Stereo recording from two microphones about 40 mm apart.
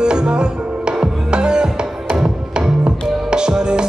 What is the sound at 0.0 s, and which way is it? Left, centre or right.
Music, right.